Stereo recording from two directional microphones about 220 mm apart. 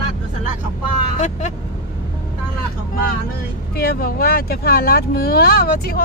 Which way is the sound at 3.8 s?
45° left (ahead or behind).